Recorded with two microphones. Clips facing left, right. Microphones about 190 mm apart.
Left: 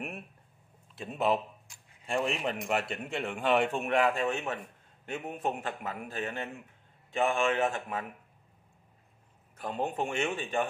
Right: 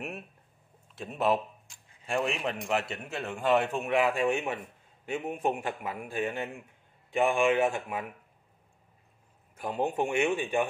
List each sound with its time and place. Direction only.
0.9 s a man's voice: centre (ahead or behind)
9.6 s a man's voice: 10° right (ahead or behind)